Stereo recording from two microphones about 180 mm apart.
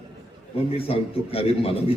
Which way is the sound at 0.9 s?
30° left (ahead or behind).